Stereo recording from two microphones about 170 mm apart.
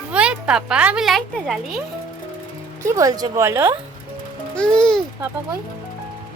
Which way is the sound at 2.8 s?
20° right (ahead or behind).